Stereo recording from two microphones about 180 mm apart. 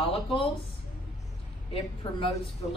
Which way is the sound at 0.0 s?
30° left (ahead or behind).